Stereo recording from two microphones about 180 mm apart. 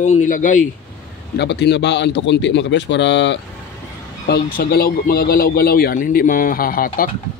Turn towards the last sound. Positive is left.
turn(degrees=50)  # may be behind; listen again after turning